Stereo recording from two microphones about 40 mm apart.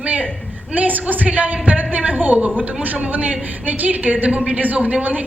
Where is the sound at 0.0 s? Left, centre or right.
Right.